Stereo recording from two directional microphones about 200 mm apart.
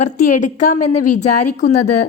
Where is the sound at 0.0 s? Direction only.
40° left (ahead or behind).